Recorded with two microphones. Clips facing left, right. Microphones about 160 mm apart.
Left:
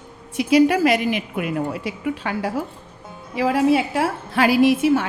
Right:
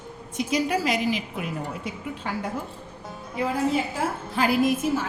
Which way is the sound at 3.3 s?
90° left.